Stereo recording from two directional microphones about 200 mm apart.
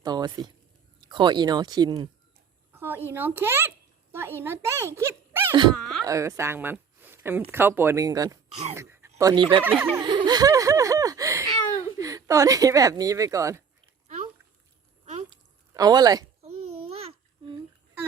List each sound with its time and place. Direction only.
0.0 s speech: 20° right (ahead or behind)
5.7 s a sound: centre (ahead or behind)
6.1 s speech: 15° right (ahead or behind)
10.0 s a sound: 20° right (ahead or behind)
11.8 s speech: 15° right (ahead or behind)
15.7 s speech: 20° right (ahead or behind)
16.9 s babbling: 30° right (ahead or behind)